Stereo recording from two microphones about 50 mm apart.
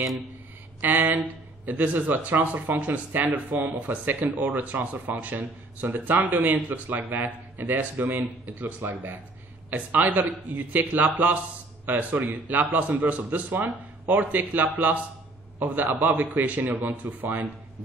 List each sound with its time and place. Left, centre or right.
0.7 s speech: right